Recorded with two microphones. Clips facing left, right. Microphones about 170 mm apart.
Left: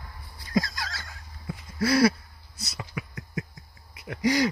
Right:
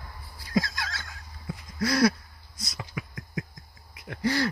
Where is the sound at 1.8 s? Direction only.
5° left (ahead or behind).